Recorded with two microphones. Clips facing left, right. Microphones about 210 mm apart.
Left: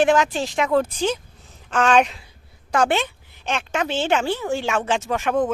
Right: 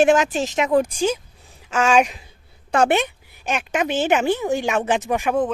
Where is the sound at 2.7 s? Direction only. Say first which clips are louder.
Right 2 dB; 25° right (ahead or behind).